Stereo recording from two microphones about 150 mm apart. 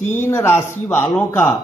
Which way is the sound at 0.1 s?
15° left (ahead or behind).